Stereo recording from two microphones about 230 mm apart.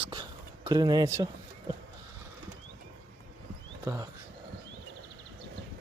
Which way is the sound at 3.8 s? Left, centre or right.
Centre.